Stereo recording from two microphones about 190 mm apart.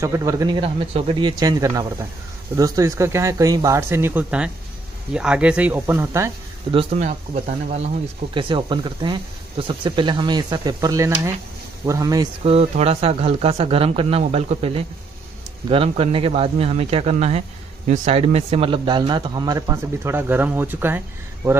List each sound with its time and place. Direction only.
0.0 s speech: 15° right (ahead or behind)
0.6 s a man's voice: 30° right (ahead or behind); by 6.3 s 15° right (ahead or behind)
6.7 s speech: 30° right (ahead or behind)
8.4 s a man's voice: 25° right (ahead or behind)
12.4 s a man's voice: 30° right (ahead or behind); by 21.0 s 10° right (ahead or behind)